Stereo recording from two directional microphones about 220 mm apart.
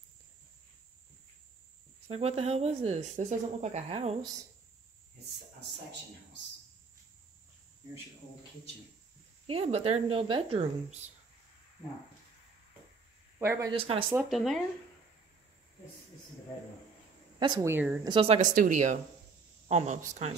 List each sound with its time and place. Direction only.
2.0 s speech: 25° right (ahead or behind)
9.5 s speech: 25° right (ahead or behind)
13.4 s speech: 15° right (ahead or behind)
13.7 s speech: 25° right (ahead or behind)
14.1 s speech: centre (ahead or behind)
17.4 s speech: 15° right (ahead or behind)
18.1 s speech: 25° right (ahead or behind)